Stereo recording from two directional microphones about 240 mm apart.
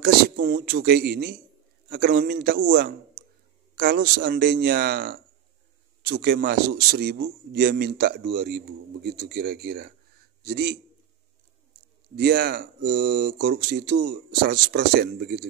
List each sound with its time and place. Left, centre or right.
0.0 s speech: right
11.7 s a sound: right
12.2 s speech: right